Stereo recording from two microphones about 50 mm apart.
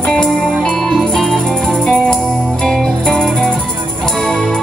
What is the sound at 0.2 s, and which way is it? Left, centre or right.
Music, centre.